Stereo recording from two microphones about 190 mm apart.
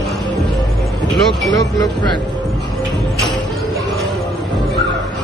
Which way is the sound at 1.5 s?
20° left (ahead or behind).